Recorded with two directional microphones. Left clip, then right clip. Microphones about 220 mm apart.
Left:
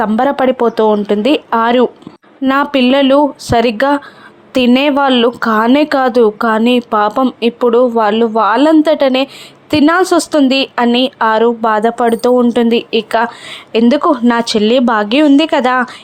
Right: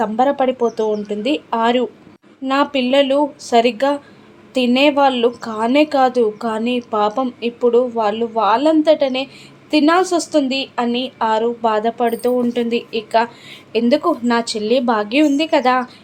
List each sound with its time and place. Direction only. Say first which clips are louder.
0.0 s speech: left 4 dB; 25° left (ahead or behind)